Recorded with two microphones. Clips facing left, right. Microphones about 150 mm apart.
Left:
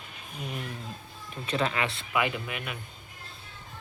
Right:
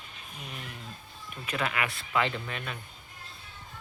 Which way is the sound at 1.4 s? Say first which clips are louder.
Left 3 dB; 30° left (ahead or behind).